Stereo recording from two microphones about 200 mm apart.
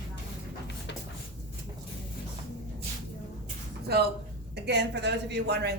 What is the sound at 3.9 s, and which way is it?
A woman's voice, 50° right (ahead or behind).